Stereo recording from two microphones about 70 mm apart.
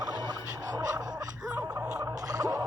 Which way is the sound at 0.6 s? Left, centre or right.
Right.